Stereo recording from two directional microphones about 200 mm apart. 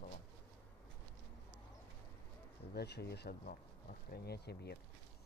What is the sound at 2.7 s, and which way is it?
Speech, 55° left (ahead or behind).